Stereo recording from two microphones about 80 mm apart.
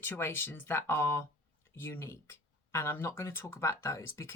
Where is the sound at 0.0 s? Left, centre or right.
Left.